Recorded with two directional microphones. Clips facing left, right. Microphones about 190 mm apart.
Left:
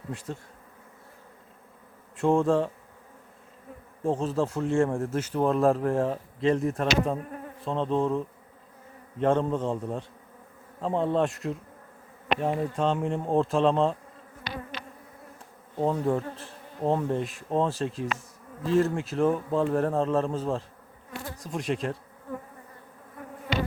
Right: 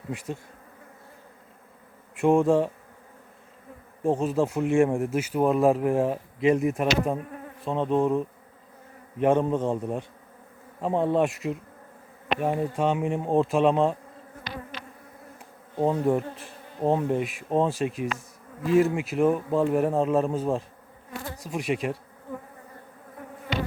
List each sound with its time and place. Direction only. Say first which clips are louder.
0.1 s speech: right 3 dB; 10° right (ahead or behind)
2.1 s speech: right 3 dB; 10° right (ahead or behind)
4.0 s speech: right 3 dB; 10° right (ahead or behind)
15.8 s speech: right 2 dB; 10° right (ahead or behind)
21.3 s insect: right 2 dB; 5° right (ahead or behind)